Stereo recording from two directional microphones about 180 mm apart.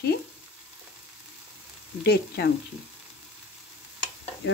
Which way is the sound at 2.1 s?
65° left (ahead or behind).